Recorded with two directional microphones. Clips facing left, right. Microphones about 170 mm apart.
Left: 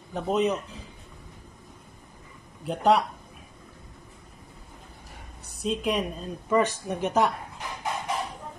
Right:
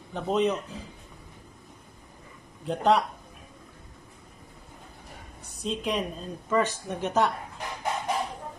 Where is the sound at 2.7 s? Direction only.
5° left (ahead or behind).